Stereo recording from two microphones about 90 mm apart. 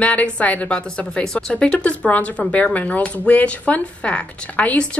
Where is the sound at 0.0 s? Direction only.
15° left (ahead or behind).